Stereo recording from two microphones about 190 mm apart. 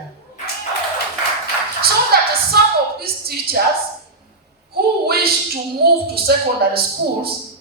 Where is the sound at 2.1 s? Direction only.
55° right (ahead or behind).